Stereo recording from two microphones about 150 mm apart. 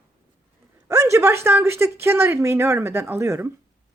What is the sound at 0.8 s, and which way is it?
Speech, 20° right (ahead or behind).